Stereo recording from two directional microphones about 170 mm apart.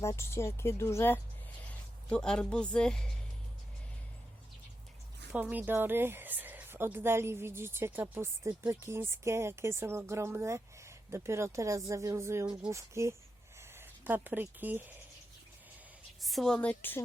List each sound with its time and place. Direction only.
0.0 s a woman's voice: 15° left (ahead or behind)
5.3 s speech: 10° right (ahead or behind)
16.2 s speech: centre (ahead or behind)